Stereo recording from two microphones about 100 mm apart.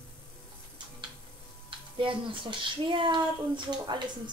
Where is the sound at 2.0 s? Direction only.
60° right (ahead or behind).